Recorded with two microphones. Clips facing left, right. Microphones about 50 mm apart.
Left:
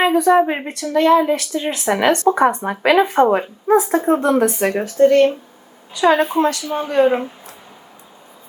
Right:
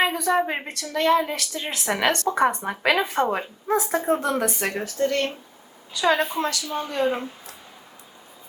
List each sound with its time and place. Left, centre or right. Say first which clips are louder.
0.3 s speech: left 8 dB; centre
2.1 s speech: left 7 dB; centre
4.1 s speech: left 8 dB; left
4.8 s speech: left 13 dB; left